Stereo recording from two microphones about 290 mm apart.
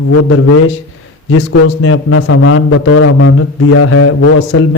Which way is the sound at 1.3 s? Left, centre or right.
Left.